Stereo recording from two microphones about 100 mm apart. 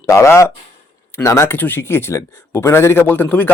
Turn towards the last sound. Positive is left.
turn(degrees=20)  # may be behind; listen again after turning